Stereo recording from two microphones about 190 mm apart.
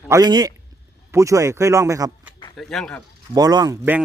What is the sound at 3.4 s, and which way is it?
Speech, 20° right (ahead or behind).